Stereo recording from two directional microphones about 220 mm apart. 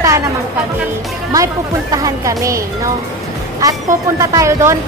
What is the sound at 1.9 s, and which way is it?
Speech, 15° right (ahead or behind).